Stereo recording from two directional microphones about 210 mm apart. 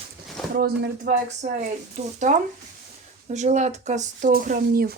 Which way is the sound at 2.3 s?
35° right (ahead or behind).